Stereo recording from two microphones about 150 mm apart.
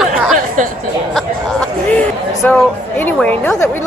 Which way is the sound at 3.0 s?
10° left (ahead or behind).